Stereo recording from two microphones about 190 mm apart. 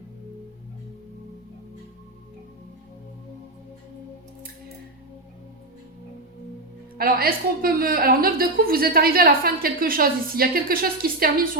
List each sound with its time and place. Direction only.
6.9 s a woman's voice: 50° right (ahead or behind)